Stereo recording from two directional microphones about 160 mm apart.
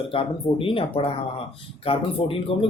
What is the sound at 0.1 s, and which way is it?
Speech, 35° left (ahead or behind).